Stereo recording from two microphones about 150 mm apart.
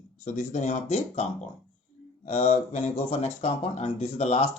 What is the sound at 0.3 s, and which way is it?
Speech, 50° left (ahead or behind).